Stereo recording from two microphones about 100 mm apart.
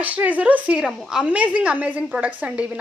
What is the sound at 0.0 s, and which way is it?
Speech, 15° right (ahead or behind).